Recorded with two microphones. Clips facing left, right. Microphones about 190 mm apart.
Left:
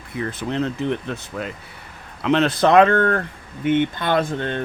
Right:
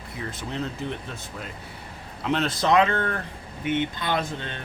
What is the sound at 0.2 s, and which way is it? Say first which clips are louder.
Speech: left 8 dB; 65° left (ahead or behind).